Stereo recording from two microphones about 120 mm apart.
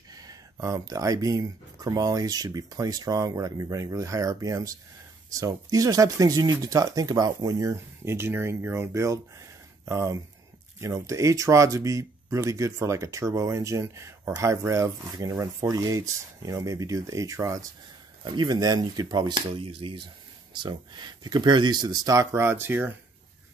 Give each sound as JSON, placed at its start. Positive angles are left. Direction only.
{"t": 0.1, "sound": "speech", "side_deg": -30}
{"t": 20.6, "sound": "speech", "side_deg": -40}